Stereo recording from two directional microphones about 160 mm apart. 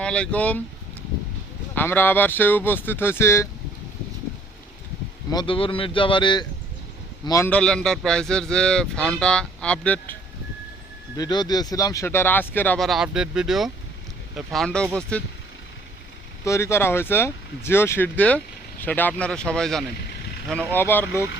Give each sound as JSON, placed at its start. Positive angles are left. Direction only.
{"t": 0.0, "sound": "speech", "side_deg": 5}
{"t": 1.7, "sound": "speech", "side_deg": 10}
{"t": 5.3, "sound": "speech", "side_deg": 30}
{"t": 7.3, "sound": "a man's voice", "side_deg": 15}
{"t": 11.2, "sound": "a man's voice", "side_deg": 25}
{"t": 16.4, "sound": "speech", "side_deg": 15}